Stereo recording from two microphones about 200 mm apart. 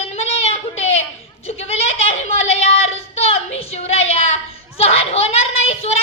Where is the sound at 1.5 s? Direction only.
30° left (ahead or behind).